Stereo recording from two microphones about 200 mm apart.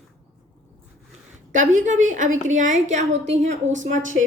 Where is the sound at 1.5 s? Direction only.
40° right (ahead or behind).